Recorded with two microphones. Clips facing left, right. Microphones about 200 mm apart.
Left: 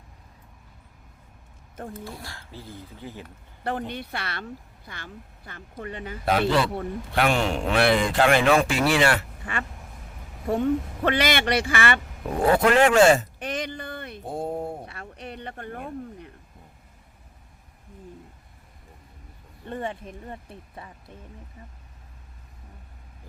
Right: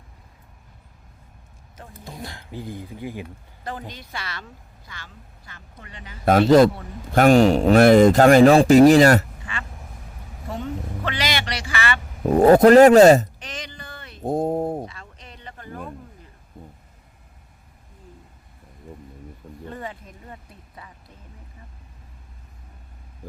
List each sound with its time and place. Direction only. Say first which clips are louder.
1.9 s speech: even; 20° right (ahead or behind)
3.6 s speech: left 5 dB; 60° left (ahead or behind)
6.2 s a man's voice: right 9 dB; 45° right (ahead or behind)
10.5 s speech: left 7 dB; 50° left (ahead or behind)
12.2 s a man's voice: right 9 dB; 40° right (ahead or behind)
13.4 s a sound: left 7 dB; 55° left (ahead or behind)
14.3 s a man's voice: right 8 dB; 40° right (ahead or behind)
14.8 s a sound: left 5 dB; 60° left (ahead or behind)
19.7 s speech: left 6 dB; 25° left (ahead or behind)